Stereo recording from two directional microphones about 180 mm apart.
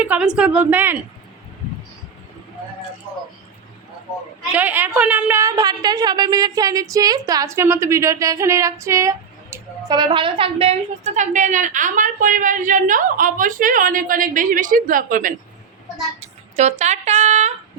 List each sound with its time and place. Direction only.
0.0 s a woman's voice: 5° right (ahead or behind)
4.5 s a woman's voice: 10° right (ahead or behind); by 15.4 s 50° right (ahead or behind)
16.2 s speech: 40° right (ahead or behind)